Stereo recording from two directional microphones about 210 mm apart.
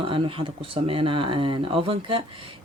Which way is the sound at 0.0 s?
25° right (ahead or behind).